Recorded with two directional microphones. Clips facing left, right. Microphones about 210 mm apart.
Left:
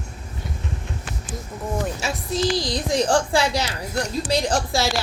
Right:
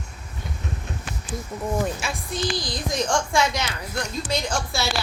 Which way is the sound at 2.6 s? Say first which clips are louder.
Left 5 dB; 90° left.